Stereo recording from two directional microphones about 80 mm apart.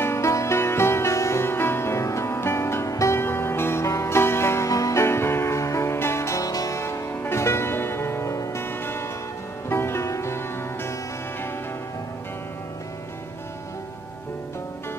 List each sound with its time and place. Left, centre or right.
0.0 s music: left
4.6 s music: left
6.4 s music: left
6.8 s music: left